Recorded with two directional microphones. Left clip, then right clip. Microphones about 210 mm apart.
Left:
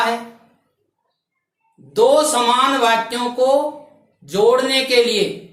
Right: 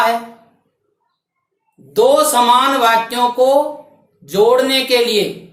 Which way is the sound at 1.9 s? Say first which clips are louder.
Right 2 dB; 10° right (ahead or behind).